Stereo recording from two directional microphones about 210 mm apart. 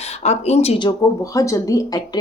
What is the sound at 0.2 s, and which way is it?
Speech, 30° left (ahead or behind).